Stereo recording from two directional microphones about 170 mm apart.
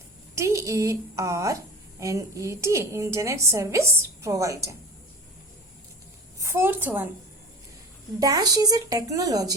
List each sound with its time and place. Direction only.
0.3 s a woman's voice: 20° right (ahead or behind)
6.4 s a woman's voice: 15° right (ahead or behind)
8.2 s speech: 20° right (ahead or behind)